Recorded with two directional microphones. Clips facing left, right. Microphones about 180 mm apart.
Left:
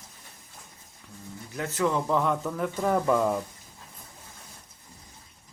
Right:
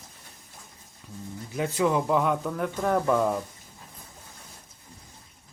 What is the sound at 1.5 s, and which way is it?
Speech, 15° right (ahead or behind).